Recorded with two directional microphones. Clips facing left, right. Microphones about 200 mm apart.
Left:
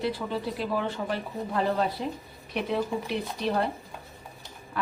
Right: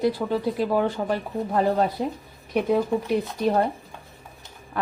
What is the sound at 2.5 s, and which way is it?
A woman's voice, 50° right (ahead or behind).